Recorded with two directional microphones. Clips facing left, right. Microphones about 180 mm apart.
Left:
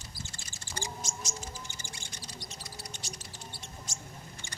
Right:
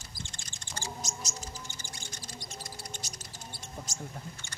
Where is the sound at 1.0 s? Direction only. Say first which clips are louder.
Even; 40° right (ahead or behind).